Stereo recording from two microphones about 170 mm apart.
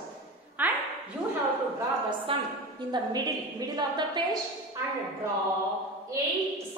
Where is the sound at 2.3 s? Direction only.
30° right (ahead or behind).